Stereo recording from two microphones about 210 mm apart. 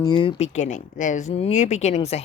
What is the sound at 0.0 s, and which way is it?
Speech, 25° left (ahead or behind).